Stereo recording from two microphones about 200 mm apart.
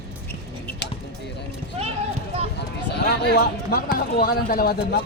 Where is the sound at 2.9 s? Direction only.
55° left (ahead or behind).